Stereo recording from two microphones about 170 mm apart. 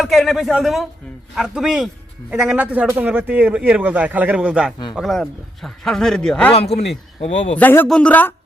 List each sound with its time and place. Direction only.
0.0 s a man's voice: centre (ahead or behind)
6.5 s speech: 35° left (ahead or behind)
7.5 s speech: 10° left (ahead or behind)